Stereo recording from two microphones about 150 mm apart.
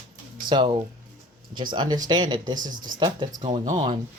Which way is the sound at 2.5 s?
60° right (ahead or behind).